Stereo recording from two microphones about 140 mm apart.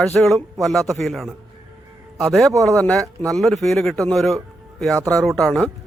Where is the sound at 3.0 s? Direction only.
20° right (ahead or behind).